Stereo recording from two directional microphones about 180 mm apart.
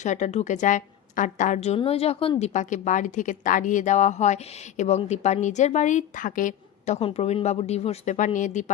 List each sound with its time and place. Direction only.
0.0 s a woman's voice: 40° left (ahead or behind)